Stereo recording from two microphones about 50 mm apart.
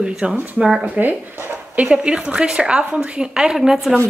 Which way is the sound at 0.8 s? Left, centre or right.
Right.